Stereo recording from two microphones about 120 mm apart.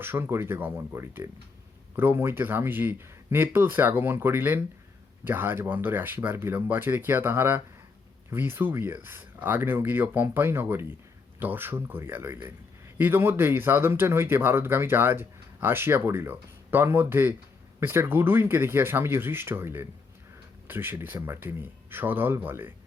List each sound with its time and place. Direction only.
0.0 s speech: 20° right (ahead or behind)